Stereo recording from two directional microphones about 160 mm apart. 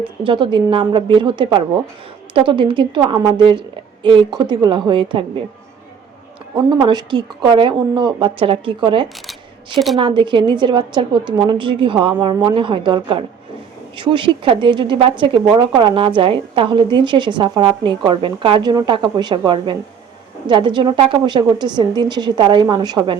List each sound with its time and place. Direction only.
0.3 s a woman's voice: 30° right (ahead or behind)
6.6 s a woman's voice: 30° right (ahead or behind)
9.7 s a woman's voice: centre (ahead or behind)
10.0 s a woman's voice: 30° right (ahead or behind)